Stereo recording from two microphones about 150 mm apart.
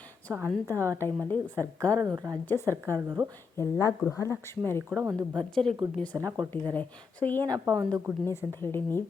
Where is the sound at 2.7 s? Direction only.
20° right (ahead or behind).